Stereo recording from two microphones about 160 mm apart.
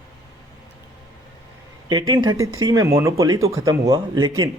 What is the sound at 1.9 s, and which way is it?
A man's voice, 30° right (ahead or behind).